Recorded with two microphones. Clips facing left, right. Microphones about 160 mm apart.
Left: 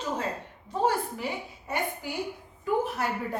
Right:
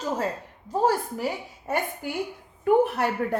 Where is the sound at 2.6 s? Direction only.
65° right (ahead or behind).